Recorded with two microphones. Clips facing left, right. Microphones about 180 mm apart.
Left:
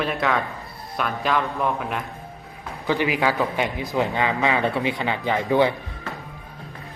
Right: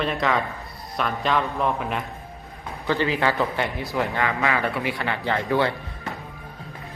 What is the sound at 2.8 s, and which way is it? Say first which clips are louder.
A man's voice: left 1 dB; 15° left (ahead or behind).